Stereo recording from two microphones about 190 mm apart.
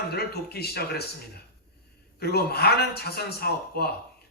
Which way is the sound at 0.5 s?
55° left (ahead or behind).